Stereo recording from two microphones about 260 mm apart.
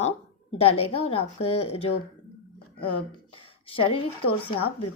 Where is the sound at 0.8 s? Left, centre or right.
Left.